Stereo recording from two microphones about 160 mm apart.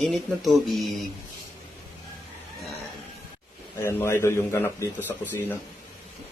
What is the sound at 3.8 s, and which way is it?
A man's voice, 15° left (ahead or behind).